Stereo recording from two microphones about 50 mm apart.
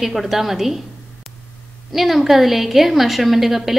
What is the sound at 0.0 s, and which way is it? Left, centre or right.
Speech, centre.